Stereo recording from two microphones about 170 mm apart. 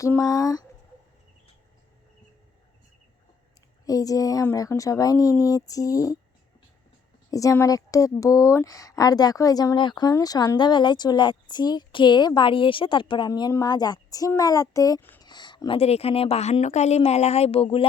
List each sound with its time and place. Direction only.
0.0 s speech: 20° left (ahead or behind)
3.8 s speech: 20° left (ahead or behind)
7.3 s speech: 20° left (ahead or behind)